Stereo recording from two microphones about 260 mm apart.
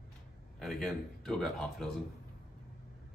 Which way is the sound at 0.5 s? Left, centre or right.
Centre.